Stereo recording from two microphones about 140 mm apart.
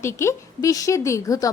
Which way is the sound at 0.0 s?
20° left (ahead or behind).